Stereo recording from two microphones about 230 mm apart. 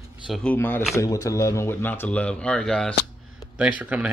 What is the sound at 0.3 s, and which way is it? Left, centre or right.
Speech, centre.